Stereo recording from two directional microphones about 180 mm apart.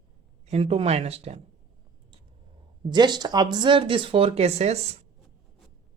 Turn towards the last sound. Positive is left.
turn(degrees=-35)  # may be behind; listen again after turning